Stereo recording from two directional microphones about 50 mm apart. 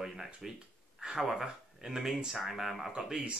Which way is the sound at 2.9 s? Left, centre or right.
Centre.